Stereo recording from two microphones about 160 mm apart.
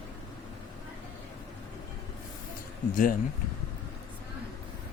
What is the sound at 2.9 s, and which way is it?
Speech, 60° left (ahead or behind).